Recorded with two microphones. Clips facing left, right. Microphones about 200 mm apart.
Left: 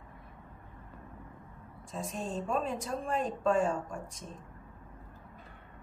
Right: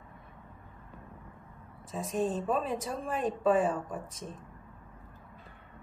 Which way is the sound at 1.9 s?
Centre (ahead or behind).